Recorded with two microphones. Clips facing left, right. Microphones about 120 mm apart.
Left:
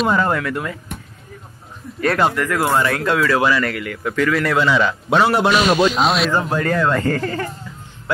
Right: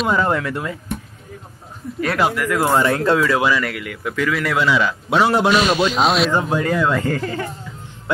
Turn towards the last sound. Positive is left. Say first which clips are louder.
# left 2 dB
turn(degrees=-5)  # may be behind; listen again after turning